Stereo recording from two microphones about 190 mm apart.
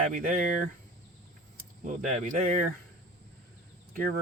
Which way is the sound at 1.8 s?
40° right (ahead or behind).